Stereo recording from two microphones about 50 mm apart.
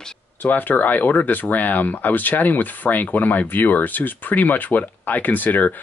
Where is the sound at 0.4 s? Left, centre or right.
Left.